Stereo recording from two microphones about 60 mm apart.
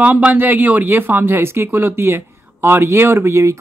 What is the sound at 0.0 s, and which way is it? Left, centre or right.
Speech, right.